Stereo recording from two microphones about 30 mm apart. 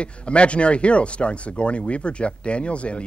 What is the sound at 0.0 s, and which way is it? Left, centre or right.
Speech, left.